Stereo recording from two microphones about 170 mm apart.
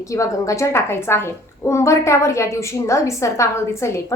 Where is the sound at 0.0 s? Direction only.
20° left (ahead or behind).